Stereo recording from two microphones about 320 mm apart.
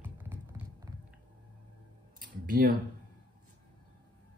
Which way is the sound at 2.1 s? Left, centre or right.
Right.